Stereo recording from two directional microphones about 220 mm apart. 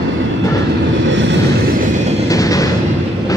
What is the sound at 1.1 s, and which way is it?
Vehicle, 55° right (ahead or behind).